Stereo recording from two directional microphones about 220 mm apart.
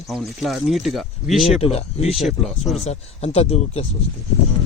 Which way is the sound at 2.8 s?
30° left (ahead or behind).